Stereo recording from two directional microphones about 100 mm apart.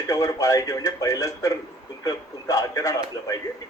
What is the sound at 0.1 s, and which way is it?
Speech, 35° left (ahead or behind).